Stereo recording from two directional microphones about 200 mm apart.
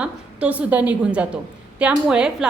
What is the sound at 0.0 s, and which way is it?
A woman's voice, 5° right (ahead or behind).